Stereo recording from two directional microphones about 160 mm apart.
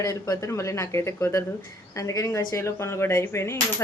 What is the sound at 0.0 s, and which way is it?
Speech, 20° left (ahead or behind).